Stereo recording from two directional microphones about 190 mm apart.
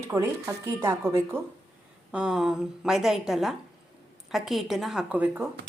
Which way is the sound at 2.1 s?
5° right (ahead or behind).